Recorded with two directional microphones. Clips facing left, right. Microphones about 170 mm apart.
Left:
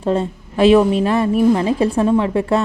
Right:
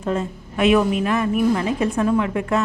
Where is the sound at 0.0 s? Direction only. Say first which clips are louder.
Left 5 dB; 30° left (ahead or behind).